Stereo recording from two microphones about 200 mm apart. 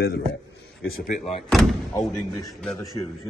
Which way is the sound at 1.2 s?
Centre (ahead or behind).